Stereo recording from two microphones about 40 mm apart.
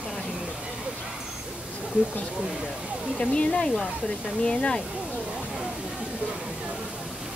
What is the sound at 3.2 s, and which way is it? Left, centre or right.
Speech, left.